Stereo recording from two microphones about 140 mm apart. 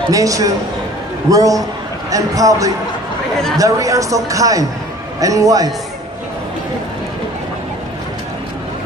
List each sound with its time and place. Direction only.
0.1 s speech: 25° right (ahead or behind)